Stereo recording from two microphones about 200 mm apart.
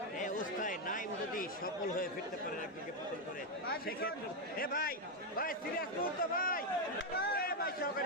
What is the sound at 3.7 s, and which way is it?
A man's voice, 50° left (ahead or behind).